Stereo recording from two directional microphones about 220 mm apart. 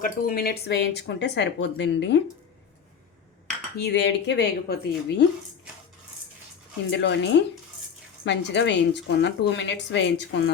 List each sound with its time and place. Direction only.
0.0 s a woman's voice: 40° left (ahead or behind)
3.8 s a woman's voice: 50° left (ahead or behind)
6.9 s a woman's voice: 55° left (ahead or behind)